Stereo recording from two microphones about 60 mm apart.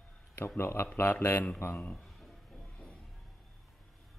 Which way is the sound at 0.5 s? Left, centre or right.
Left.